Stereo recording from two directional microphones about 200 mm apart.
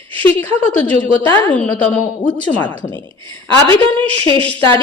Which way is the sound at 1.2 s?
10° left (ahead or behind).